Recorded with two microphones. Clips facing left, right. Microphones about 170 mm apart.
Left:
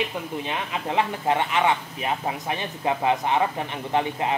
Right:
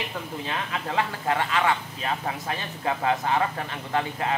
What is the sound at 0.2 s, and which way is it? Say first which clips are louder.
A woman's voice: left 2 dB; 15° left (ahead or behind).